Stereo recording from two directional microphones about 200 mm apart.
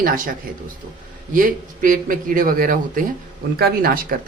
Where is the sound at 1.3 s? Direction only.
40° right (ahead or behind).